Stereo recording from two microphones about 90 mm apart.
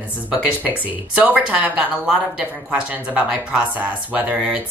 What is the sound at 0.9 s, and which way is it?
Speech, 20° right (ahead or behind).